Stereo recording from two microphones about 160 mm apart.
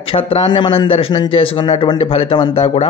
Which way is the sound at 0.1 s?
30° left (ahead or behind).